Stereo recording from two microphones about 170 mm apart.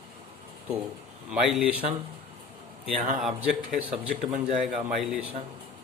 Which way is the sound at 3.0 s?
50° right (ahead or behind).